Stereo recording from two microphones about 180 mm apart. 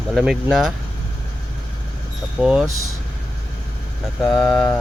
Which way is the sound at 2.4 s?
5° right (ahead or behind).